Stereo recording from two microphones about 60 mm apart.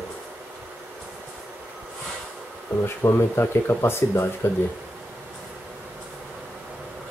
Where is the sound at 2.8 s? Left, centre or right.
Left.